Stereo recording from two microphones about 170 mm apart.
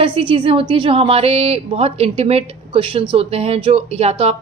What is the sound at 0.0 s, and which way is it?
A woman's voice, 30° right (ahead or behind).